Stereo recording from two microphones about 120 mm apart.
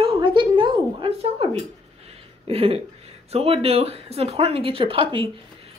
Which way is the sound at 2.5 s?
55° right (ahead or behind).